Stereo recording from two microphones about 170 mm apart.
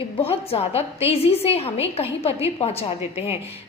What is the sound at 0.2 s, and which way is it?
A woman's voice, 35° left (ahead or behind).